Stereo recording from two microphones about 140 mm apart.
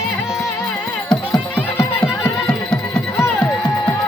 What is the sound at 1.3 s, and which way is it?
Music, 25° left (ahead or behind).